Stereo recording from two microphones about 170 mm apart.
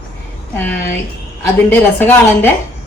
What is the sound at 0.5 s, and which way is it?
A woman's voice, 10° left (ahead or behind).